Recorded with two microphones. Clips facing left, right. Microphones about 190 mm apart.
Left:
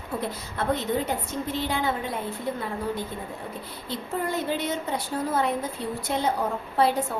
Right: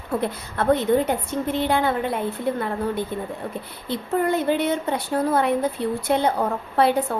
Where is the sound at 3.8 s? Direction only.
55° right (ahead or behind).